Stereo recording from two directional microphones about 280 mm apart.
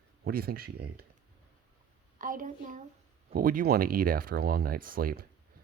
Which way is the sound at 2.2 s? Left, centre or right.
Right.